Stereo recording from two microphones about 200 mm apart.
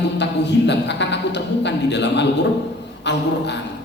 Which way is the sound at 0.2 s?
60° left (ahead or behind).